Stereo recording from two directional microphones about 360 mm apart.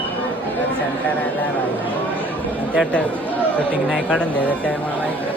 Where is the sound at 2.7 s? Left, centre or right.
Centre.